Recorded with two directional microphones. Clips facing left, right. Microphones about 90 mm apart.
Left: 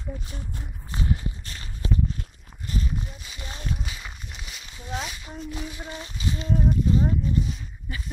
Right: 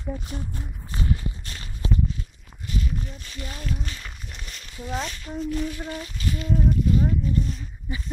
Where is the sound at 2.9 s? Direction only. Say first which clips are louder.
Right 1 dB; 15° left (ahead or behind).